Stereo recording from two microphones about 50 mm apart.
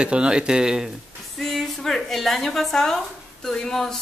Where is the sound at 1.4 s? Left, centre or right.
Centre.